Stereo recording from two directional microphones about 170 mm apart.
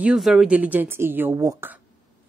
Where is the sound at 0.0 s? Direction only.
5° right (ahead or behind).